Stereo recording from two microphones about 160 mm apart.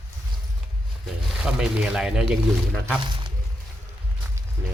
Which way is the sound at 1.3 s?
5° right (ahead or behind).